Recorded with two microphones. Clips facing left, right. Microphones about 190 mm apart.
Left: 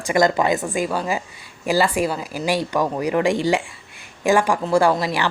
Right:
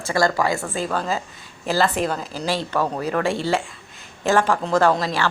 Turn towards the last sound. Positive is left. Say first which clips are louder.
# left 1 dB
turn(degrees=15)  # may be behind; listen again after turning